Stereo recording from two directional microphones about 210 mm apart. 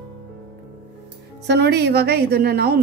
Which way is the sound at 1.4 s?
50° right (ahead or behind).